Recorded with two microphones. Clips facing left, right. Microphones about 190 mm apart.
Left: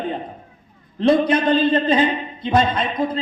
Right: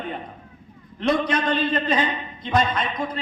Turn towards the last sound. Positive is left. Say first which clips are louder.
# left 5 dB
turn(degrees=25)  # may be behind; listen again after turning